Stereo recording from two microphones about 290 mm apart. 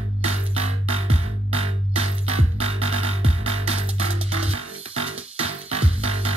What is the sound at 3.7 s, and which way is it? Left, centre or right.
Music, right.